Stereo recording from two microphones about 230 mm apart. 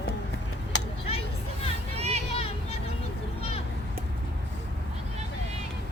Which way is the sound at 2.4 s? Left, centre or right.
Left.